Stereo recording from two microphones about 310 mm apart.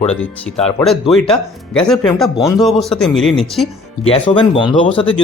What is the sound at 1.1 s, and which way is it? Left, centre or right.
Speech, centre.